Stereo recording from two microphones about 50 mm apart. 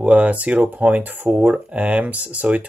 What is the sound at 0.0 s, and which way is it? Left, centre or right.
Speech, right.